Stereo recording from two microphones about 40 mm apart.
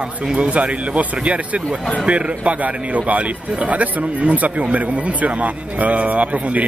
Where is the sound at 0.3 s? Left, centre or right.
Right.